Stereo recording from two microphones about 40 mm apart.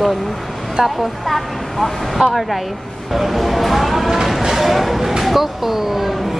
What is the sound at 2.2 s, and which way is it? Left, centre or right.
Speech, right.